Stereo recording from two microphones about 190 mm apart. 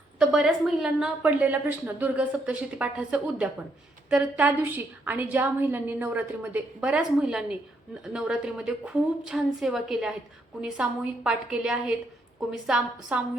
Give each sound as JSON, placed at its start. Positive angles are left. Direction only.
{"t": 0.2, "sound": "a woman's voice", "side_deg": -5}